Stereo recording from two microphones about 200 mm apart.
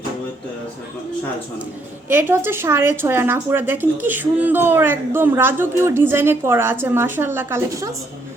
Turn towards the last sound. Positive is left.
turn(degrees=-15)  # may be behind; listen again after turning